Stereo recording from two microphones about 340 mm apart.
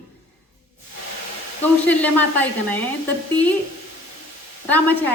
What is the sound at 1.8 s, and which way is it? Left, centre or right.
Speech, centre.